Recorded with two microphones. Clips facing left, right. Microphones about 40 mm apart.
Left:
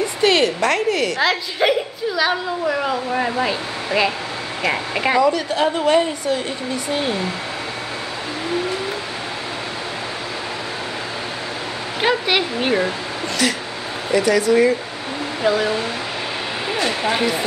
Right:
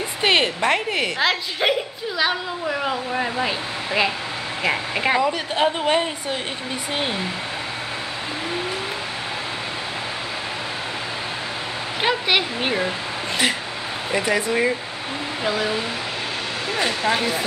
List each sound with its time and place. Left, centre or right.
0.2 s a woman's voice: right
1.2 s a woman's voice: centre
3.1 s speech: centre
5.2 s a woman's voice: right
12.0 s speech: centre
14.1 s a woman's voice: right
15.4 s speech: centre